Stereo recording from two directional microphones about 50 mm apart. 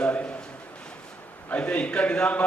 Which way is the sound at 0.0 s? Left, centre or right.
Left.